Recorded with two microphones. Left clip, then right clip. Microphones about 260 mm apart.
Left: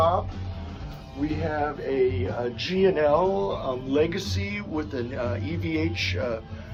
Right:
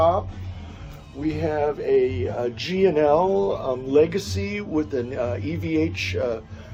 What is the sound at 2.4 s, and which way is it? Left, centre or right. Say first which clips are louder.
Speech: right 2 dB; right.